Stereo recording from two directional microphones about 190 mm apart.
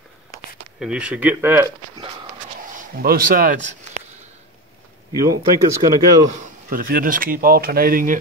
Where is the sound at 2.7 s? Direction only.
50° right (ahead or behind).